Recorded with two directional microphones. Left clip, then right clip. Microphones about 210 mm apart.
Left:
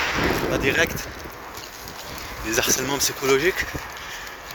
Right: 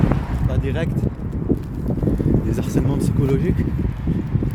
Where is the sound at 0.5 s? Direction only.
10° left (ahead or behind).